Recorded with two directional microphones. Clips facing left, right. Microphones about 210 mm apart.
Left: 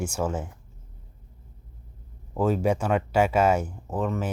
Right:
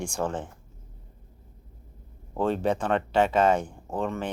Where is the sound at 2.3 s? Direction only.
5° left (ahead or behind).